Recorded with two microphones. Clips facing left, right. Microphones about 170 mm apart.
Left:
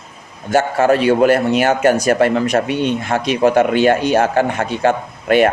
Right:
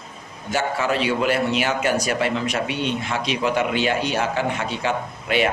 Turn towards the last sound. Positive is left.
turn(degrees=50)  # may be behind; listen again after turning